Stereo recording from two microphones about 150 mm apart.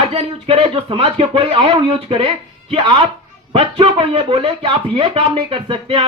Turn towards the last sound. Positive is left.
turn(degrees=-35)  # may be behind; listen again after turning